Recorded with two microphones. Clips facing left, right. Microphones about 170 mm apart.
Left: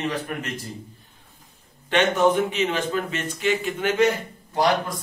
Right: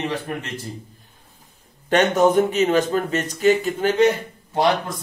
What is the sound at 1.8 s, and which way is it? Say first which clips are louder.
Speech: right 3 dB; 40° right (ahead or behind).